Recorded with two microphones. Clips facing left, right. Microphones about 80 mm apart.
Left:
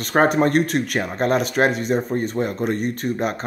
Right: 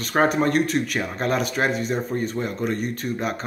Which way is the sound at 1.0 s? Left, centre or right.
Left.